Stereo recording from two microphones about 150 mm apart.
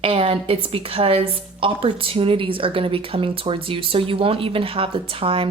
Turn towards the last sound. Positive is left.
turn(degrees=-35)  # may be behind; listen again after turning